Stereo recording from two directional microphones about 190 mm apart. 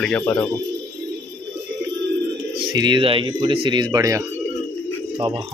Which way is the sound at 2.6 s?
25° right (ahead or behind).